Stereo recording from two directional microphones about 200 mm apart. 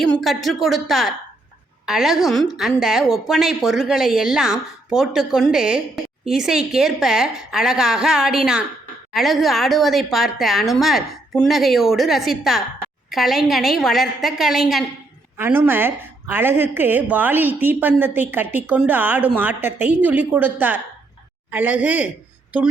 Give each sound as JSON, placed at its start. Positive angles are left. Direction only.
{"t": 0.0, "sound": "a woman's voice", "side_deg": 0}